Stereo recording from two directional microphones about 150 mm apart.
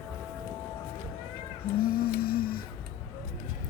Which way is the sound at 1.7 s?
90° left.